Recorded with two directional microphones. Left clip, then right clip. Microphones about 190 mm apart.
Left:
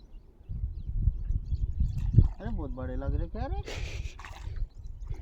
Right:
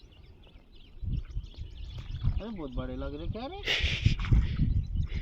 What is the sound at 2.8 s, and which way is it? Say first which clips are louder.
Speech: left 1 dB; 5° left (ahead or behind).